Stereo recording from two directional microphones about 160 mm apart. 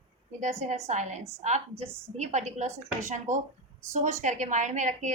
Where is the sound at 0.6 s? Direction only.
45° right (ahead or behind).